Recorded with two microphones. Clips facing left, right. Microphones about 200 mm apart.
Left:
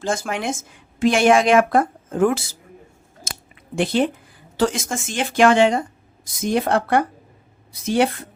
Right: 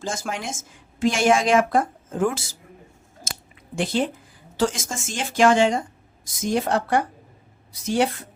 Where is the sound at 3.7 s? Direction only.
60° left (ahead or behind).